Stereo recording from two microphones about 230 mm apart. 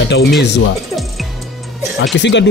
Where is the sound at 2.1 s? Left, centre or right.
Left.